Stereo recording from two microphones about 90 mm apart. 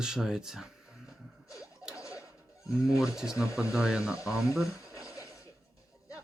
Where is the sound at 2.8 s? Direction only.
5° right (ahead or behind).